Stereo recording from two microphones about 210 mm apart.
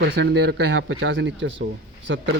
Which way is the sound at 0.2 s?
50° right (ahead or behind).